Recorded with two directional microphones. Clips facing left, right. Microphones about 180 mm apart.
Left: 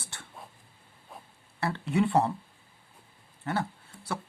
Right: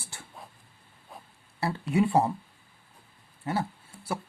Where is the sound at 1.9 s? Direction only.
25° right (ahead or behind).